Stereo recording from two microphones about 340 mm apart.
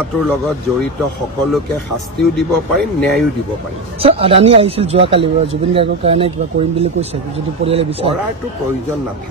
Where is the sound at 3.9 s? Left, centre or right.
Centre.